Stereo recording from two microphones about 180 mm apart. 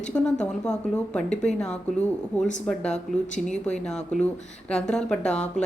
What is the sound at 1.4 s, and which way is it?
A woman's voice, 5° left (ahead or behind).